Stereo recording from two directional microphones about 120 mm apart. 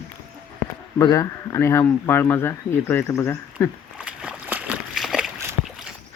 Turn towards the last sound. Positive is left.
turn(degrees=-5)  # may be behind; listen again after turning